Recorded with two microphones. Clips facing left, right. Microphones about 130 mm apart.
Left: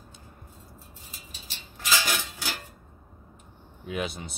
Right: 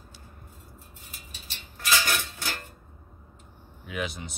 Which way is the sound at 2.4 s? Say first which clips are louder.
Even; 10° left (ahead or behind).